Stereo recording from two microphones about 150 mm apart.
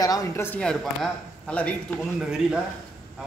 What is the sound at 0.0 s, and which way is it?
Speech, 25° left (ahead or behind).